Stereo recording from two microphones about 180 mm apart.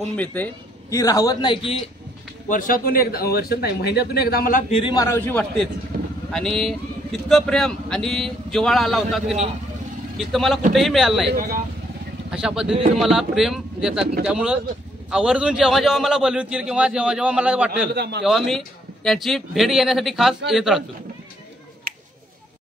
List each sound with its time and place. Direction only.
0.1 s a man's voice: 10° left (ahead or behind); by 1.8 s 30° left (ahead or behind)
2.4 s speech: 50° left (ahead or behind)
4.6 s a man's voice: 30° left (ahead or behind)
4.9 s a man's voice: 15° left (ahead or behind); by 11.2 s centre (ahead or behind)
11.3 s speech: 50° right (ahead or behind)
12.3 s speech: 5° right (ahead or behind)
17.9 s a man's voice: 65° right (ahead or behind)
18.2 s speech: centre (ahead or behind)
21.9 s a sound: 55° right (ahead or behind)